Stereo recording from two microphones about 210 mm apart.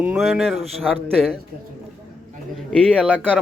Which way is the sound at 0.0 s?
5° right (ahead or behind).